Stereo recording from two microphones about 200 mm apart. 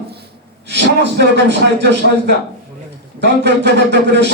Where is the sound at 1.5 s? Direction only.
60° right (ahead or behind).